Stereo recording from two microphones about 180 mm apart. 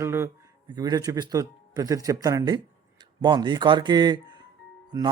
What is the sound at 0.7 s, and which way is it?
A man's voice, 20° right (ahead or behind).